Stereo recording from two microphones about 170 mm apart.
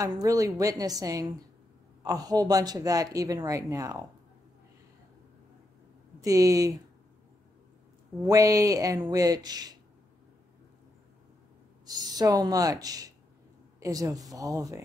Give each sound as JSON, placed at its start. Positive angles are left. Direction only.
{"t": 0.0, "sound": "speech", "side_deg": -20}
{"t": 6.2, "sound": "speech", "side_deg": -20}
{"t": 8.2, "sound": "speech", "side_deg": -20}
{"t": 11.8, "sound": "speech", "side_deg": -25}